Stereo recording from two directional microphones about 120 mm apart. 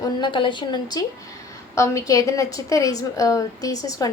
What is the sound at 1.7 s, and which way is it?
A woman's voice, 25° left (ahead or behind).